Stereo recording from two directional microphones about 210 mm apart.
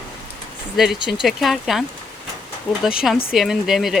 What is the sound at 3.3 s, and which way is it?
Speech, centre (ahead or behind).